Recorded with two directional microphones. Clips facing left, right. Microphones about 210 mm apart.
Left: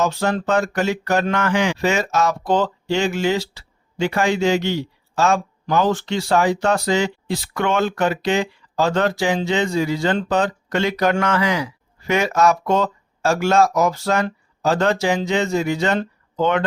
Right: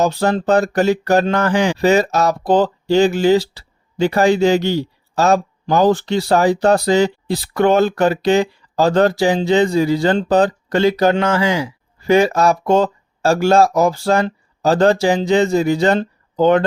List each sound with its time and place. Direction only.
0.0 s speech: 35° right (ahead or behind)